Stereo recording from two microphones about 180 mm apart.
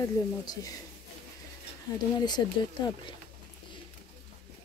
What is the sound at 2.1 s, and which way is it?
Speech, 25° left (ahead or behind).